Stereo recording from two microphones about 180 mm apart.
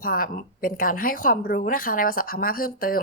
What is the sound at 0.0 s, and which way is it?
A woman's voice, 50° left (ahead or behind).